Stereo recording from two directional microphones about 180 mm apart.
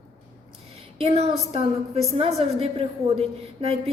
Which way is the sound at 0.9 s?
35° right (ahead or behind).